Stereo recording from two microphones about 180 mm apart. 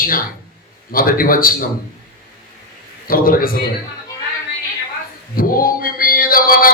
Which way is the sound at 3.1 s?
50° left (ahead or behind).